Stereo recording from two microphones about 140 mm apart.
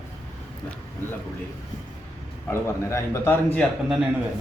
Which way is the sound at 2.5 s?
20° left (ahead or behind).